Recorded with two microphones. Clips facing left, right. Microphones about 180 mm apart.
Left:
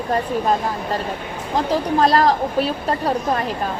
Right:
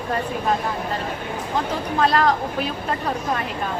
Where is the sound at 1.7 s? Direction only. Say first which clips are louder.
Left 5 dB; 35° left (ahead or behind).